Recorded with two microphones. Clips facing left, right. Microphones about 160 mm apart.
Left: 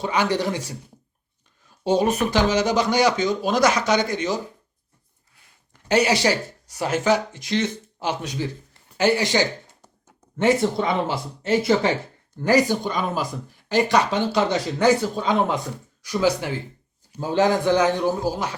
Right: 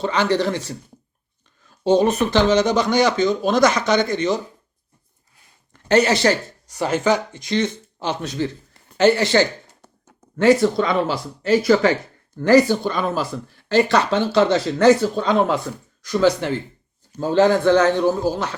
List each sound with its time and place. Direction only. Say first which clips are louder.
0.0 s speech: right 3 dB; 10° left (ahead or behind)
1.8 s speech: right 4 dB; 10° left (ahead or behind)
5.9 s speech: right 3 dB; 10° left (ahead or behind)